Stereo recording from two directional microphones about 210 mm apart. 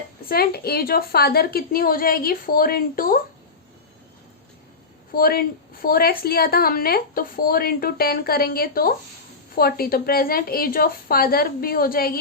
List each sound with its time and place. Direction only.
0.3 s a woman's voice: 45° left (ahead or behind)
5.1 s a woman's voice: 45° left (ahead or behind)